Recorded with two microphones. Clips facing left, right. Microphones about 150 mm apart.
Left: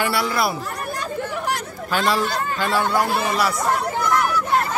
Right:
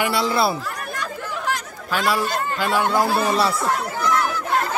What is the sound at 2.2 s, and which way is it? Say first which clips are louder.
Speech: even; 15° right (ahead or behind).